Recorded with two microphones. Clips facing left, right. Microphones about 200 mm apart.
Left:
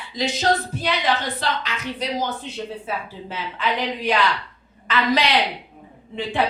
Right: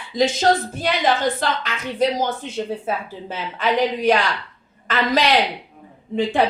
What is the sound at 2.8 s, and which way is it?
Speech, 45° right (ahead or behind).